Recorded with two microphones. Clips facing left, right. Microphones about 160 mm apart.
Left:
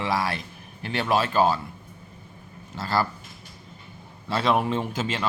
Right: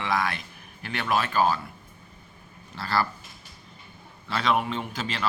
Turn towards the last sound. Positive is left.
turn(degrees=30)  # may be behind; listen again after turning